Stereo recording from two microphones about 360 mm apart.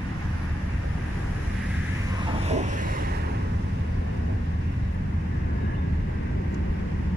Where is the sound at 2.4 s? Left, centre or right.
Centre.